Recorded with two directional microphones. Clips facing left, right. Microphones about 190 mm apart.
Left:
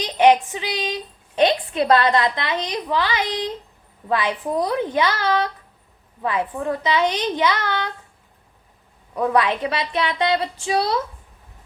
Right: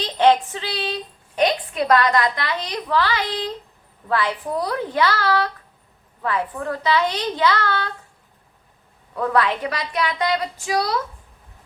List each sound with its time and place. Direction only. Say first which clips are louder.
0.0 s a woman's voice: left 1 dB; 15° left (ahead or behind)
9.1 s a woman's voice: left 1 dB; 20° left (ahead or behind)